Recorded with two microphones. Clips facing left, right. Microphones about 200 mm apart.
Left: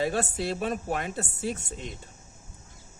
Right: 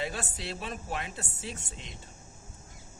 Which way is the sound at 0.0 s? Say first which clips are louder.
Left 8 dB; 45° left (ahead or behind).